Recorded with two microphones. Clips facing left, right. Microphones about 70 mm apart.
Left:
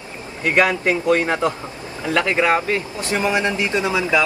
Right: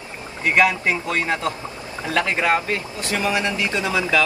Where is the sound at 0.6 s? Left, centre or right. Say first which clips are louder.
Left 1 dB; left.